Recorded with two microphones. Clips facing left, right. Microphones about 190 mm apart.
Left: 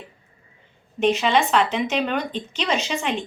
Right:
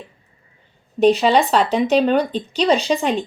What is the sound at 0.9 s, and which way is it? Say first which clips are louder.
Speech: right 5 dB; 35° right (ahead or behind).